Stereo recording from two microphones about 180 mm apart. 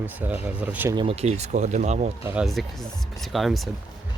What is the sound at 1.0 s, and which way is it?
Speech, 35° right (ahead or behind).